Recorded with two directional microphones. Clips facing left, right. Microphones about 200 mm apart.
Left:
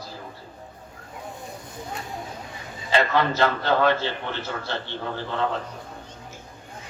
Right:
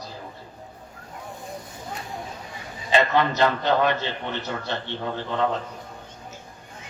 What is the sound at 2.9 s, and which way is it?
A man's voice, 20° right (ahead or behind).